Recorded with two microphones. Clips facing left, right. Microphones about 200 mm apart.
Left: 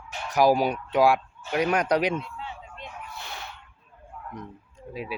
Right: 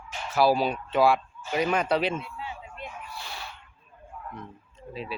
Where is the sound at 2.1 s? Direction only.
5° right (ahead or behind).